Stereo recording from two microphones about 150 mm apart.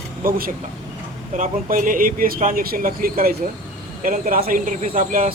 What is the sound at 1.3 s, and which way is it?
Speech, 65° right (ahead or behind).